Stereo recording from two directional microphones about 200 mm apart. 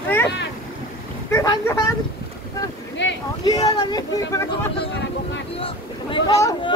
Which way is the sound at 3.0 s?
60° left (ahead or behind).